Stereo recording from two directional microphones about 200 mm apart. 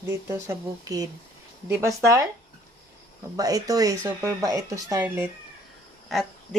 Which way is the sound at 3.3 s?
15° right (ahead or behind).